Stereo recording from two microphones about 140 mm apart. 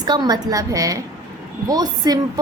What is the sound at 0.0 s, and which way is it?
A woman's voice, 30° right (ahead or behind).